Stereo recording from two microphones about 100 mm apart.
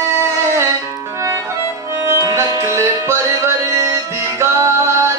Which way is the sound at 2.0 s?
30° right (ahead or behind).